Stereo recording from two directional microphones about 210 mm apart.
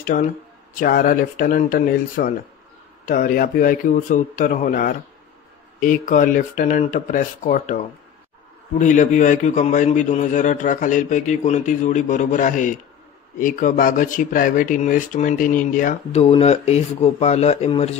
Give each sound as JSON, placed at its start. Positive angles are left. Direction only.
{"t": 0.0, "sound": "speech", "side_deg": 35}